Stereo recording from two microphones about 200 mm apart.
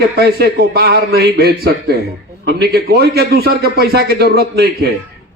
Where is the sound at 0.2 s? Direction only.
55° right (ahead or behind).